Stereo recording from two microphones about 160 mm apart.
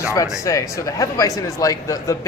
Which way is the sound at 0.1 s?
20° left (ahead or behind).